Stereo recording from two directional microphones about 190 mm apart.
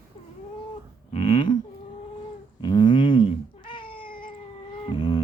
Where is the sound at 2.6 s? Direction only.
25° left (ahead or behind).